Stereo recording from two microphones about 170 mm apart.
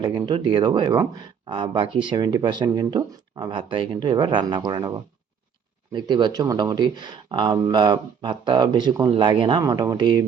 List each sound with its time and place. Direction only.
0.0 s speech: 25° right (ahead or behind)